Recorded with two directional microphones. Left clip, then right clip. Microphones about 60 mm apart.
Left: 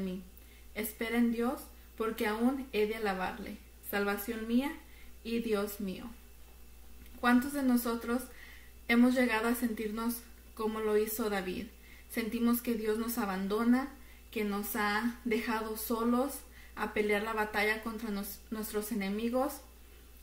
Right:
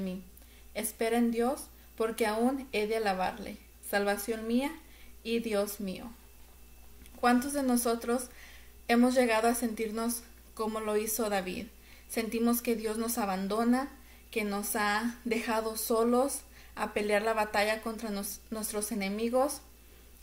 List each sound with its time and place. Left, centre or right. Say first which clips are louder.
0.7 s a woman's voice: right 4 dB; right
7.2 s a woman's voice: right 2 dB; right